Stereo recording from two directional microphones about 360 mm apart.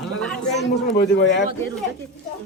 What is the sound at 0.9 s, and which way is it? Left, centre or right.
Speech, left.